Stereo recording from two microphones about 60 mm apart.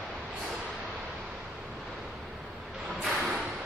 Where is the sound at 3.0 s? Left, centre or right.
Centre.